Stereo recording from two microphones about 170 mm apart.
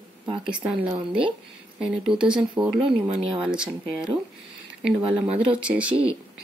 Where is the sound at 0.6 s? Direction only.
10° right (ahead or behind).